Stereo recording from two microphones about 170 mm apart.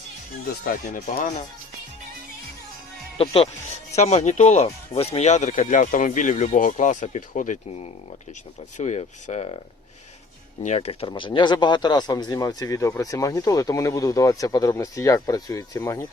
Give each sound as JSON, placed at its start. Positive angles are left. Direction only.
{"t": 0.4, "sound": "speech", "side_deg": 55}
{"t": 3.2, "sound": "speech", "side_deg": 35}
{"t": 10.6, "sound": "speech", "side_deg": 40}
{"t": 11.1, "sound": "speech", "side_deg": 25}